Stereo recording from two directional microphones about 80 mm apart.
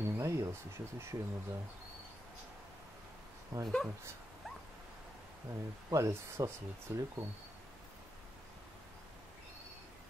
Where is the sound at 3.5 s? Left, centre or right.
Right.